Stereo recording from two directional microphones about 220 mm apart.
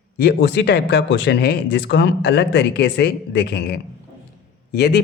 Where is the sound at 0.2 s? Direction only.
50° left (ahead or behind).